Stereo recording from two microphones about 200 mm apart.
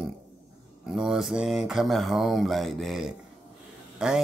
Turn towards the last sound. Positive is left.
turn(degrees=-5)  # may be behind; listen again after turning